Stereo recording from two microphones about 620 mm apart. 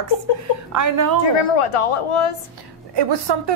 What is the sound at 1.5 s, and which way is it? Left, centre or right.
Speech, left.